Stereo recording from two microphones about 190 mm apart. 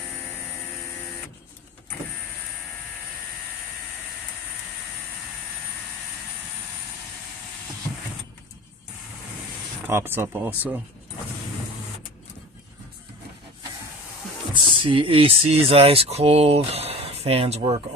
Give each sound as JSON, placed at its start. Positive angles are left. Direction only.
{"t": 9.8, "sound": "speech", "side_deg": -15}
{"t": 14.5, "sound": "speech", "side_deg": -25}